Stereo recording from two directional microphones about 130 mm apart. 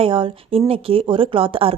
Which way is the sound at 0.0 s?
45° right (ahead or behind).